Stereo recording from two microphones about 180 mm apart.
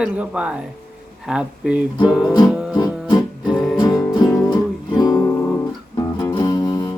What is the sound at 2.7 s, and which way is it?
Music, 20° left (ahead or behind).